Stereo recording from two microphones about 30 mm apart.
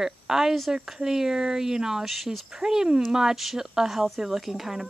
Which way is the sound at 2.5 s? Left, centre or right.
Centre.